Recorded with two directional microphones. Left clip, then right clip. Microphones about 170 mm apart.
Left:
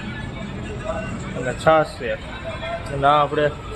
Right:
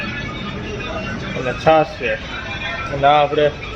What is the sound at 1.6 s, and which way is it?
Speech, 5° left (ahead or behind).